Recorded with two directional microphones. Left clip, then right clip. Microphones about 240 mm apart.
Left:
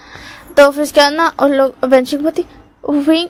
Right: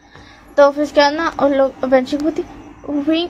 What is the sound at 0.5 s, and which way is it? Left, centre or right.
A woman's voice, left.